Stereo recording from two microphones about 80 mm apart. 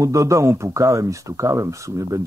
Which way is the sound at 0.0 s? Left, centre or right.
Right.